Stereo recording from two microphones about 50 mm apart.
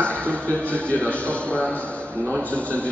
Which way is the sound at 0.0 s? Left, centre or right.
Left.